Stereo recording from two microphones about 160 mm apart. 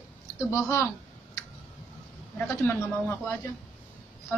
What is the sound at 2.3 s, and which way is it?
A man's voice, 10° left (ahead or behind).